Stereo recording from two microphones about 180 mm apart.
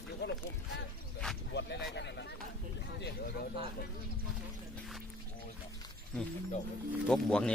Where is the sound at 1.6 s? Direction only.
70° left (ahead or behind).